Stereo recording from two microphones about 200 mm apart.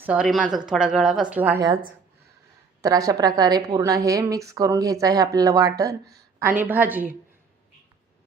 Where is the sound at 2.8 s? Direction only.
15° right (ahead or behind).